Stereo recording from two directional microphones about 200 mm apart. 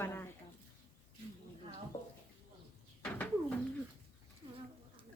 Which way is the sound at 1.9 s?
40° left (ahead or behind).